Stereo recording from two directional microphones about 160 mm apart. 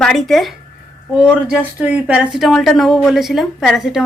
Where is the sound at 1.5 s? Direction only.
10° right (ahead or behind).